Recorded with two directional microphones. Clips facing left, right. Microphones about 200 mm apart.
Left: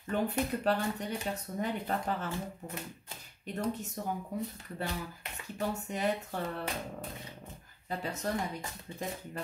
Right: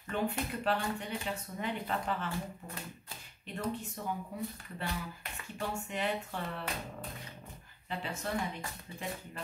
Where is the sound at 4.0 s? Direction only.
45° left (ahead or behind).